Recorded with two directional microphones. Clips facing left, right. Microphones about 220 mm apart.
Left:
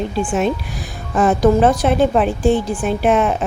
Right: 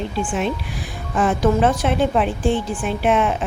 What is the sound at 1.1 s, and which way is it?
Speech, 40° left (ahead or behind).